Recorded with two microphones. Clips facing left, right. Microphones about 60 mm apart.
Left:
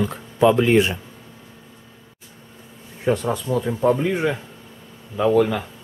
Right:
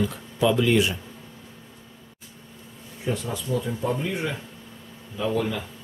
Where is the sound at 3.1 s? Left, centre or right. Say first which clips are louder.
Left 6 dB; left.